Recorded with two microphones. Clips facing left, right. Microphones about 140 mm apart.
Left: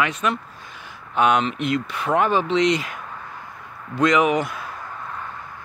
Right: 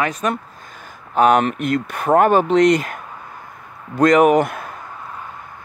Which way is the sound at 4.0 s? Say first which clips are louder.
Right 6 dB; 45° right (ahead or behind).